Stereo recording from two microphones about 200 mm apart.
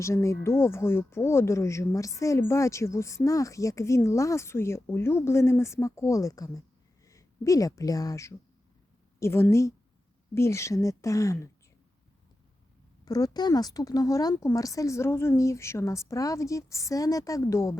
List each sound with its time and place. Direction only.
0.0 s speech: 15° left (ahead or behind)
13.1 s speech: 20° left (ahead or behind)